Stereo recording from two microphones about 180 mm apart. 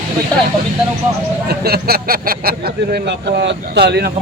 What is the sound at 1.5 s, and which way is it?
Speech, 60° right (ahead or behind).